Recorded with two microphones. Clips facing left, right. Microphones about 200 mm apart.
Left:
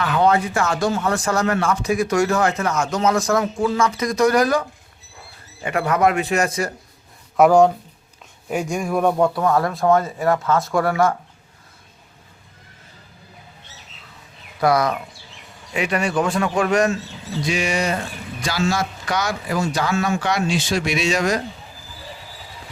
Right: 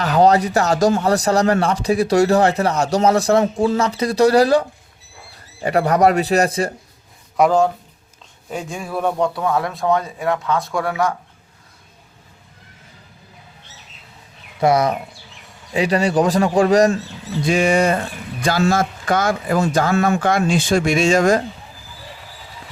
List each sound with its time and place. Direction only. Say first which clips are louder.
0.0 s a man's voice: right 4 dB; 40° right (ahead or behind)
7.3 s speech: left 2 dB; 5° left (ahead or behind)
8.7 s speech: left 3 dB; 10° left (ahead or behind)
14.6 s a man's voice: right 2 dB; 25° right (ahead or behind)
17.4 s a man's voice: right 7 dB; 50° right (ahead or behind)